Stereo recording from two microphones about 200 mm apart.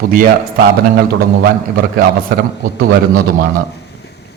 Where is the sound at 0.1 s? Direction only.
45° right (ahead or behind).